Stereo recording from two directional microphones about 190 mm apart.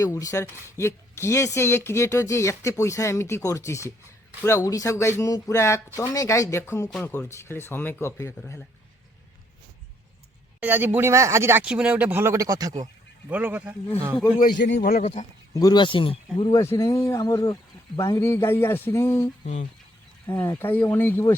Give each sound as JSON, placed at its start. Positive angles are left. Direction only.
{"t": 0.0, "sound": "speech", "side_deg": 15}
{"t": 10.6, "sound": "speech", "side_deg": -10}
{"t": 14.3, "sound": "a man's voice", "side_deg": 60}
{"t": 15.0, "sound": "speech", "side_deg": 35}
{"t": 15.5, "sound": "speech", "side_deg": 20}
{"t": 20.4, "sound": "speech", "side_deg": 10}